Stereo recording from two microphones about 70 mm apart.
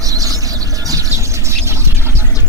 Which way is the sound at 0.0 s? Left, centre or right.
Right.